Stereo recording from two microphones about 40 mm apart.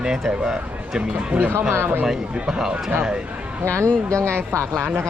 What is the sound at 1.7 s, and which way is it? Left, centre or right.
Speech, right.